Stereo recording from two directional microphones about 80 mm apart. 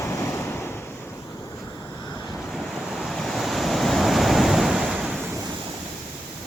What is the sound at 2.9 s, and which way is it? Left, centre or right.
Waves, centre.